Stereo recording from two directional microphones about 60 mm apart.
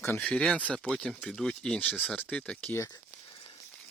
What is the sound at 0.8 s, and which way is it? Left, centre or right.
Speech, centre.